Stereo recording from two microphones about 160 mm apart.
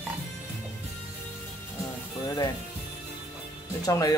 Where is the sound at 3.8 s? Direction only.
20° left (ahead or behind).